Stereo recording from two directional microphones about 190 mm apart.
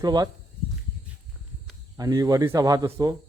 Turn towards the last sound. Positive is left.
turn(degrees=-20)  # may be behind; listen again after turning